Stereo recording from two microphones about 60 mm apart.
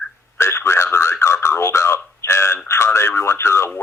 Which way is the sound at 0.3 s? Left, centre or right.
Left.